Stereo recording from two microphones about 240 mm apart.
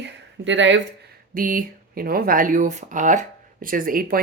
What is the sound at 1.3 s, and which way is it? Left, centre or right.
Speech, right.